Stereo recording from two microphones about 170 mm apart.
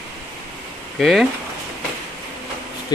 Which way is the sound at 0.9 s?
Centre (ahead or behind).